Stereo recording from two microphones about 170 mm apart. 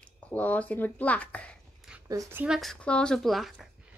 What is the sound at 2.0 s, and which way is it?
Speech, 20° right (ahead or behind).